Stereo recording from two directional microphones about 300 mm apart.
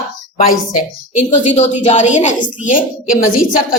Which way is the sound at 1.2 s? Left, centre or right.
Left.